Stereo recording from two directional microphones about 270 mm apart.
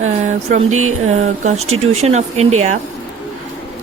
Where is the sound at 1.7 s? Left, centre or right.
Right.